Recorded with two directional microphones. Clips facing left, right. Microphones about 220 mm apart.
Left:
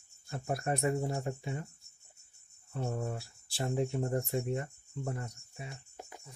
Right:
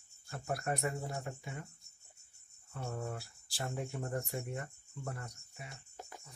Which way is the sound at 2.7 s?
25° left (ahead or behind).